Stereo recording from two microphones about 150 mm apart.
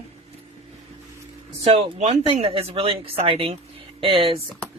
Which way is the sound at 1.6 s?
40° right (ahead or behind).